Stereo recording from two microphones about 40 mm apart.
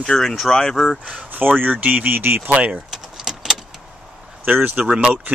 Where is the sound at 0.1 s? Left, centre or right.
Centre.